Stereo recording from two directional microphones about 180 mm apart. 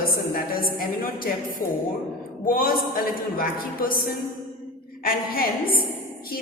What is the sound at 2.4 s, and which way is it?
A man's voice, 50° left (ahead or behind).